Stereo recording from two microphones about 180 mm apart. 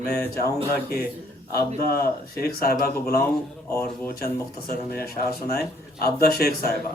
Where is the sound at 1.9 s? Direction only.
55° left (ahead or behind).